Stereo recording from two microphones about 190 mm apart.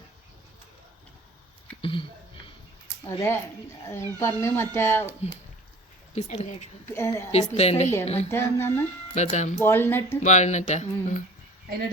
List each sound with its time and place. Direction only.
1.8 s speech: 25° left (ahead or behind)
3.0 s speech: 15° left (ahead or behind)
6.1 s speech: 35° left (ahead or behind)
6.8 s speech: 15° left (ahead or behind)
7.5 s speech: 35° left (ahead or behind)
8.3 s speech: 15° left (ahead or behind)
9.1 s speech: 35° left (ahead or behind)
9.6 s speech: 10° left (ahead or behind)
10.2 s speech: 40° left (ahead or behind)